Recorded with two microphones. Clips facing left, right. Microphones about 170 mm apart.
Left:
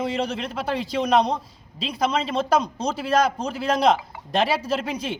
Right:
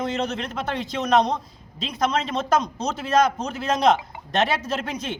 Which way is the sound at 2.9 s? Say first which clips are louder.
Right 1 dB; 5° left (ahead or behind).